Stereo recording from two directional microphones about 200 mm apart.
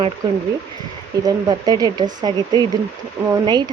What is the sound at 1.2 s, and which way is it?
Speech, 20° right (ahead or behind).